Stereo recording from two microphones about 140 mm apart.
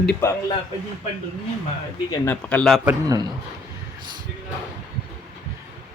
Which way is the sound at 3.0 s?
25° right (ahead or behind).